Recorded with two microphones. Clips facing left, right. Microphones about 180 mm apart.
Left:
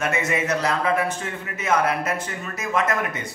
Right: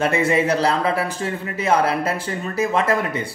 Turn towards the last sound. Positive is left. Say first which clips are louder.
# right 4 dB
turn(degrees=-30)  # may be behind; listen again after turning